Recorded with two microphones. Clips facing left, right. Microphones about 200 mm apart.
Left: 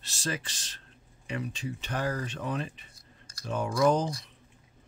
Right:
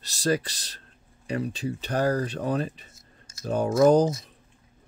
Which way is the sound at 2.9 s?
25° right (ahead or behind).